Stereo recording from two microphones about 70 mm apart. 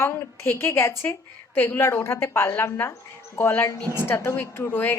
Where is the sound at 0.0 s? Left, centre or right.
Left.